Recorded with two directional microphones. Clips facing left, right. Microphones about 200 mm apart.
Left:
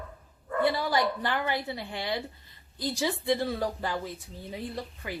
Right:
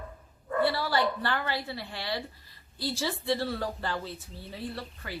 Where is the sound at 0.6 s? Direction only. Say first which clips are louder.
Left 1 dB; 20° left (ahead or behind).